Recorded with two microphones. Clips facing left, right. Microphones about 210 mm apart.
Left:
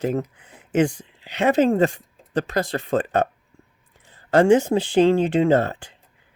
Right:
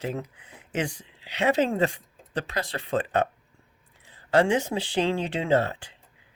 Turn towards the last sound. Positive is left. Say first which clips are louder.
# left 5 dB
turn(degrees=50)  # may be behind; listen again after turning